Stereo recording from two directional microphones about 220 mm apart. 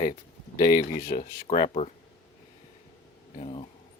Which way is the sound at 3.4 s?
25° left (ahead or behind).